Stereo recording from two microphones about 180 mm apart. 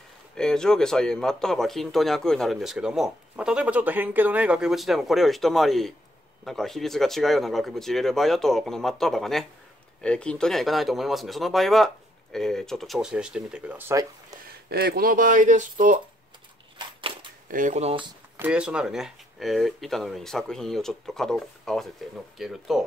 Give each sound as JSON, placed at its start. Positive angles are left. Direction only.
{"t": 0.4, "sound": "speech", "side_deg": 5}
{"t": 14.7, "sound": "speech", "side_deg": -60}
{"t": 16.7, "sound": "a sound", "side_deg": -25}
{"t": 17.5, "sound": "speech", "side_deg": -45}
{"t": 18.4, "sound": "speech", "side_deg": -5}